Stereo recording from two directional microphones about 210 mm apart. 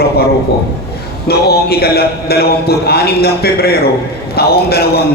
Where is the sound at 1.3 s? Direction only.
50° left (ahead or behind).